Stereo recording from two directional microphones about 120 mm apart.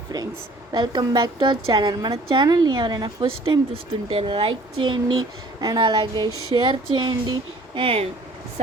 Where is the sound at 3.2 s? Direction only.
50° right (ahead or behind).